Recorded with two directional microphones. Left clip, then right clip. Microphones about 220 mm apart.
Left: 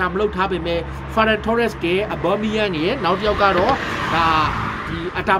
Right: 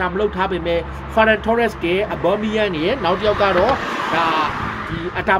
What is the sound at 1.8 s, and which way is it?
Speech, 20° left (ahead or behind).